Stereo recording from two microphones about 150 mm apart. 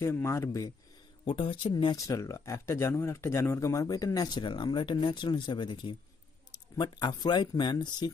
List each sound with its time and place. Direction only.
0.0 s speech: 15° left (ahead or behind)
1.2 s speech: 35° left (ahead or behind)